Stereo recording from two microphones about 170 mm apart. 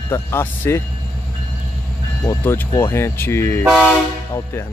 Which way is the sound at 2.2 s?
15° left (ahead or behind).